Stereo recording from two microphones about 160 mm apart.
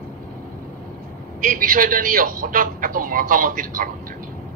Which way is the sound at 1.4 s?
60° right (ahead or behind).